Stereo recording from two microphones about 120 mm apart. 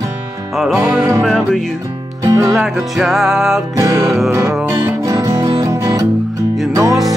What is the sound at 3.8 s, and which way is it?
Music, 25° right (ahead or behind).